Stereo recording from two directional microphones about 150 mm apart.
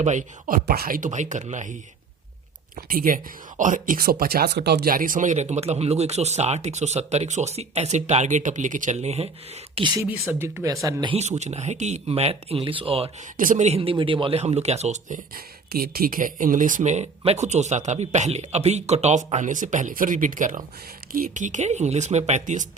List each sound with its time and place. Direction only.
0.0 s speech: 55° right (ahead or behind)
2.7 s speech: 70° right (ahead or behind); by 9.3 s 45° right (ahead or behind)
9.7 s speech: 30° right (ahead or behind)
10.0 s speech: 10° right (ahead or behind)
11.0 s speech: 45° right (ahead or behind)
13.3 s speech: 60° right (ahead or behind)
15.7 s speech: 85° right; by 22.6 s 55° right (ahead or behind)